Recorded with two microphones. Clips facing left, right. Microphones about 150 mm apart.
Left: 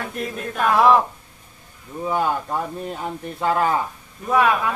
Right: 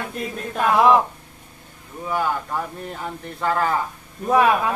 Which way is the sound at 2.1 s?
25° left (ahead or behind).